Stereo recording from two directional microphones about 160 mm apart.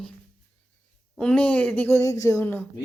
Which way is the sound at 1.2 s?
5° left (ahead or behind).